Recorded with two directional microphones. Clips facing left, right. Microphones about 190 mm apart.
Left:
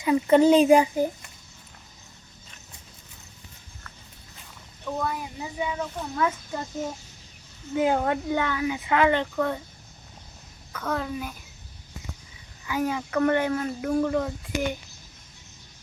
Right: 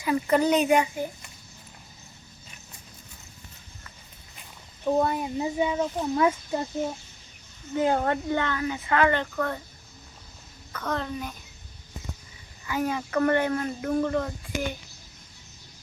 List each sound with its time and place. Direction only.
0.0 s a woman's voice: 25° left (ahead or behind)
4.9 s a child's voice: 30° right (ahead or behind)
7.8 s speech: 10° left (ahead or behind)
10.7 s speech: 5° left (ahead or behind)
12.6 s speech: 10° left (ahead or behind)